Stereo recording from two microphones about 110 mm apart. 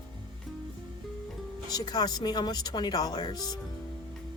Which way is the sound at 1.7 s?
35° left (ahead or behind).